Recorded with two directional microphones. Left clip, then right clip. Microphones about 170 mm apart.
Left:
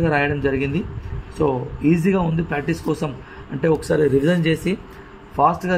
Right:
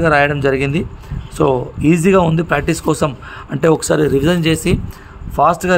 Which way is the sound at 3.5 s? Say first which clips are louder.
Right 5 dB; 55° right (ahead or behind).